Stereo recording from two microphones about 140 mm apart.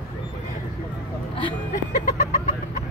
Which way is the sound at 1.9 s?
60° left (ahead or behind).